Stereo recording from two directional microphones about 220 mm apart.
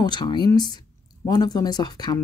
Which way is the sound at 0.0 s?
20° left (ahead or behind).